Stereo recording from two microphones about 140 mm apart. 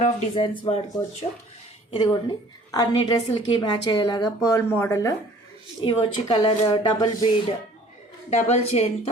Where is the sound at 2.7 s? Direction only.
30° left (ahead or behind).